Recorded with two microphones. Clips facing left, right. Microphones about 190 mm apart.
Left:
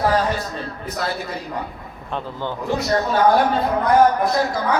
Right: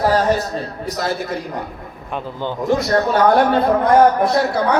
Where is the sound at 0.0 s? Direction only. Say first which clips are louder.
Right 4 dB; 40° right (ahead or behind).